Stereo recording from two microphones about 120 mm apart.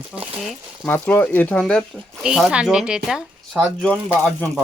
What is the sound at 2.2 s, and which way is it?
Speech, 5° right (ahead or behind).